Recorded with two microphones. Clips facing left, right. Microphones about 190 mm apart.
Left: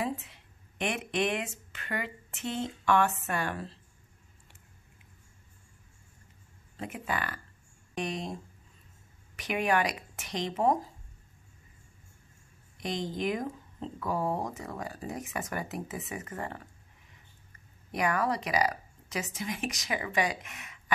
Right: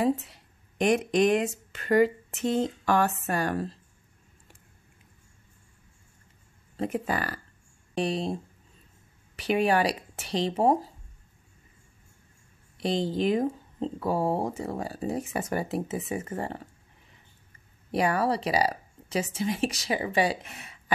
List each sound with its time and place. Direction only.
0.0 s speech: 40° right (ahead or behind)
6.8 s a woman's voice: 35° right (ahead or behind)
9.4 s a woman's voice: 30° right (ahead or behind)
12.7 s speech: 30° right (ahead or behind)
17.9 s a woman's voice: 30° right (ahead or behind)